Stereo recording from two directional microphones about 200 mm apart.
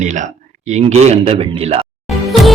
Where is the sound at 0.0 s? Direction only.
40° right (ahead or behind).